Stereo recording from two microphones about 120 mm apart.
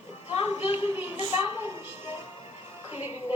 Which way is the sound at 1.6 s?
20° right (ahead or behind).